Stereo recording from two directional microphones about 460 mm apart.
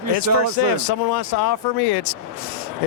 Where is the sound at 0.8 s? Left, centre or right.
Left.